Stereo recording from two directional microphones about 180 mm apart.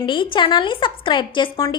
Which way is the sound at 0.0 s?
25° left (ahead or behind).